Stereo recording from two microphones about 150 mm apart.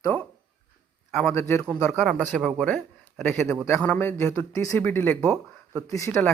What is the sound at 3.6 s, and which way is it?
A man's voice, 10° left (ahead or behind).